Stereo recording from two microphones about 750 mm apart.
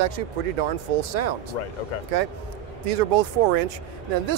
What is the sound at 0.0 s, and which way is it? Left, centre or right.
Speech, right.